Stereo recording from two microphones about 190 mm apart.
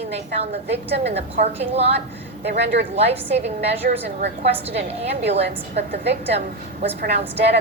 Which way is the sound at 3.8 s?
50° right (ahead or behind).